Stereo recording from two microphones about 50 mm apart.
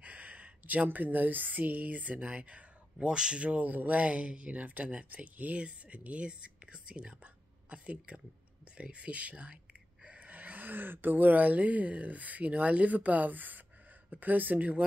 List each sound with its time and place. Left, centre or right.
0.0 s a sound: right
0.8 s speech: right; by 3.4 s centre
3.4 s speech: right